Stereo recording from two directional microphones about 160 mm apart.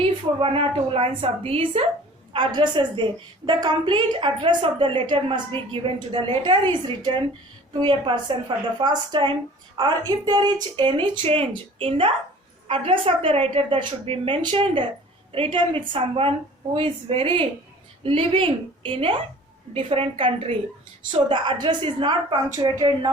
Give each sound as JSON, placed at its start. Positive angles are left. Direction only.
{"t": 0.0, "sound": "a woman's voice", "side_deg": -35}